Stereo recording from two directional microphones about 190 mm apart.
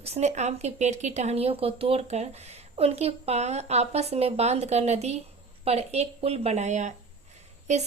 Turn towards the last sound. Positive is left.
turn(degrees=-35)  # may be behind; listen again after turning